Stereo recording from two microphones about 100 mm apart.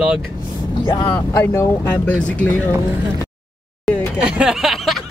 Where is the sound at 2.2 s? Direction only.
10° left (ahead or behind).